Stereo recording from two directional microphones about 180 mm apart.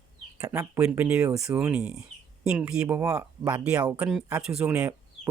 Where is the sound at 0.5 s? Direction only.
15° right (ahead or behind).